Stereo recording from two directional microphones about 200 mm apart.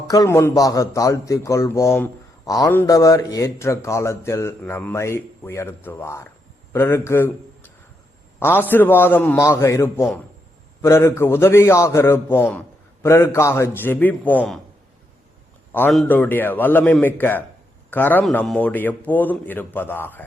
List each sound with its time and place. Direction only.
0.1 s a man's voice: 15° left (ahead or behind)
15.9 s a man's voice: 5° left (ahead or behind)